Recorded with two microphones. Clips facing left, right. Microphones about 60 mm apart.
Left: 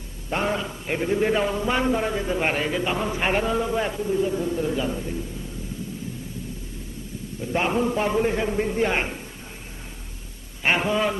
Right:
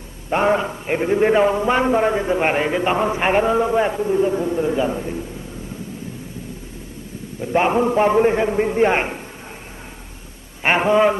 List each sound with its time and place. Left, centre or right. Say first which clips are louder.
0.3 s a man's voice: right 8 dB; right
7.4 s a man's voice: right 6 dB; right
10.6 s a man's voice: right 7 dB; right